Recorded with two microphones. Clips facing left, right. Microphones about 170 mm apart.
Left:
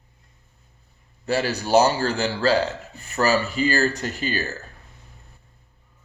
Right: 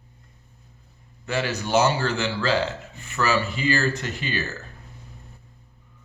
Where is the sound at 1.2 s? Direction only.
35° left (ahead or behind).